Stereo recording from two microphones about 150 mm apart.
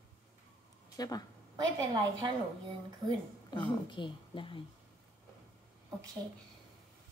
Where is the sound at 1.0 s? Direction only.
25° left (ahead or behind).